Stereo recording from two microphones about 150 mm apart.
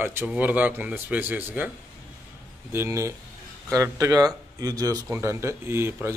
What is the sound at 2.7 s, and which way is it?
Speech, 15° right (ahead or behind).